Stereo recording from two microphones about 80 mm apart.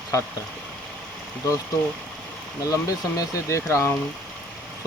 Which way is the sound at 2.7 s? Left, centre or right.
Left.